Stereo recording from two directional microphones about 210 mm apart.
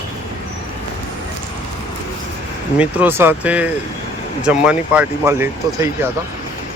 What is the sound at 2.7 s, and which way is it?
Speech, 5° right (ahead or behind).